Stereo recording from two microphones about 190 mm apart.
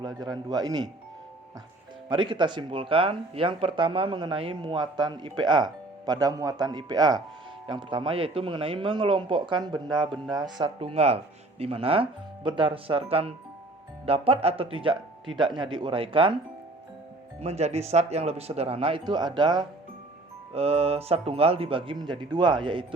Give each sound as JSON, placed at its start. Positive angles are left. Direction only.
{"t": 0.0, "sound": "speech", "side_deg": -20}
{"t": 2.0, "sound": "speech", "side_deg": -25}
{"t": 17.4, "sound": "speech", "side_deg": -35}